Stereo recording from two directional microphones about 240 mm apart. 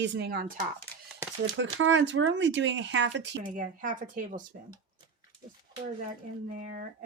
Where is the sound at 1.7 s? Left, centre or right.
Right.